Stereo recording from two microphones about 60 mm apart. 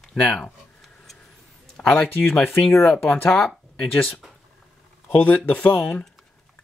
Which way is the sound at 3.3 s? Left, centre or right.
Centre.